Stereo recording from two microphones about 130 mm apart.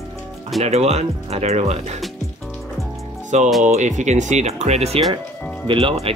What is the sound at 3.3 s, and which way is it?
Speech, 65° right (ahead or behind).